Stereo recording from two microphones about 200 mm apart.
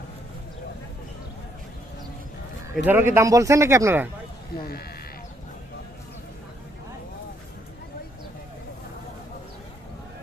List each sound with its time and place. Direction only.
2.7 s a man's voice: 10° right (ahead or behind)
4.6 s speech: 50° left (ahead or behind)